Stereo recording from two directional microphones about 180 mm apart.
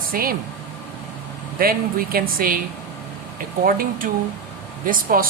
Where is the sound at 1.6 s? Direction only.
55° right (ahead or behind).